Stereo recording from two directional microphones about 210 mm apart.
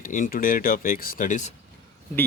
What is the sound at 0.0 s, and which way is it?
A man's voice, 40° left (ahead or behind).